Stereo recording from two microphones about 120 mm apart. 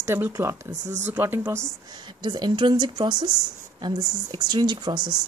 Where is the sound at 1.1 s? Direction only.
20° right (ahead or behind).